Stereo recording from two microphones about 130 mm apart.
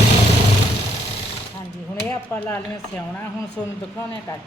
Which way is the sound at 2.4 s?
10° left (ahead or behind).